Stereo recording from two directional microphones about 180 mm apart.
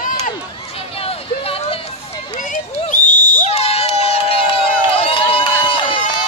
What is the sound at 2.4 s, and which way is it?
Crowd, 45° left (ahead or behind).